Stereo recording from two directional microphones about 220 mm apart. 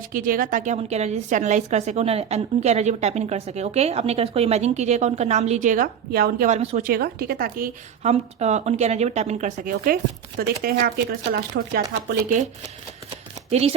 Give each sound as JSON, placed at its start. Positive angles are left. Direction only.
{"t": 0.1, "sound": "a woman's voice", "side_deg": -40}
{"t": 13.5, "sound": "speech", "side_deg": -30}